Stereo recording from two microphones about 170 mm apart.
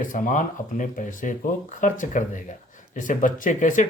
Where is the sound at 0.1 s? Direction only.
50° left (ahead or behind).